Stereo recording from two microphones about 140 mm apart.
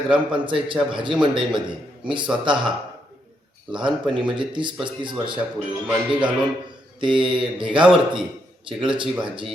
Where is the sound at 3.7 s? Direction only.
35° right (ahead or behind).